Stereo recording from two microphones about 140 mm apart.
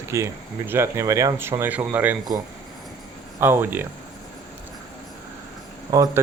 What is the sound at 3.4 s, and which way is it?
Speech, 15° right (ahead or behind).